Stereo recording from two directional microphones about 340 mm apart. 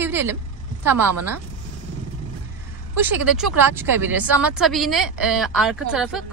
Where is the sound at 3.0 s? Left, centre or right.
Centre.